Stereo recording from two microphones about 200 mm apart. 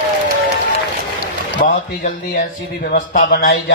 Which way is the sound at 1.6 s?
45° left (ahead or behind).